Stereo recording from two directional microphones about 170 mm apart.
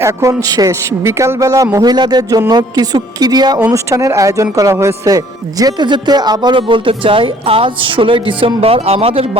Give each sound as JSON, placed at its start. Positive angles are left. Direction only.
{"t": 0.0, "sound": "a man's voice", "side_deg": -15}